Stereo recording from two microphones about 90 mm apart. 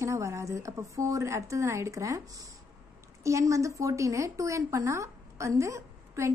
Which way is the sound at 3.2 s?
35° right (ahead or behind).